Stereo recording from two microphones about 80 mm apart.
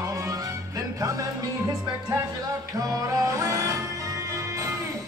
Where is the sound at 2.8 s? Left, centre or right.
Right.